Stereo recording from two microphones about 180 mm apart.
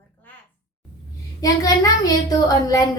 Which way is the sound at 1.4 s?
20° left (ahead or behind).